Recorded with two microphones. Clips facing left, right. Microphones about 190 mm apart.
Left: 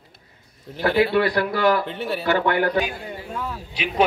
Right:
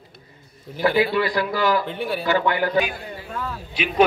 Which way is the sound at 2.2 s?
55° left (ahead or behind).